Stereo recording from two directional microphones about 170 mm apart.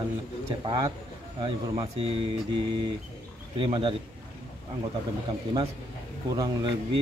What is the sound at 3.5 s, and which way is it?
Speech, 30° right (ahead or behind).